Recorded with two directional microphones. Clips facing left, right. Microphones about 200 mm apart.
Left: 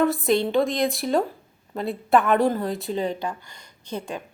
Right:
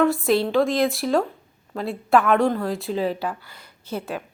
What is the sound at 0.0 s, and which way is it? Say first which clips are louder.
A woman's voice: right 1 dB; centre (ahead or behind).